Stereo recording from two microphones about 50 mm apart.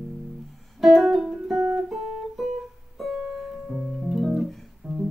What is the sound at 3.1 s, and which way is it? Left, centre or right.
Music, centre.